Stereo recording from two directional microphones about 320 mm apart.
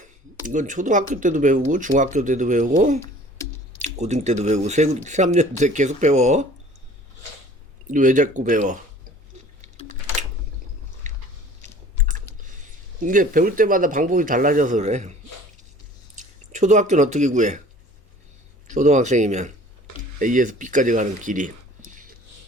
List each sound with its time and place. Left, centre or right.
0.4 s speech: right
7.9 s speech: right
11.1 s biting: right
13.1 s speech: right
16.1 s speech: right
18.7 s speech: right